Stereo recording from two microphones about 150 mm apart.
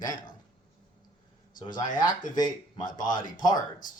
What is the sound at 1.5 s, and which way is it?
Speech, 30° left (ahead or behind).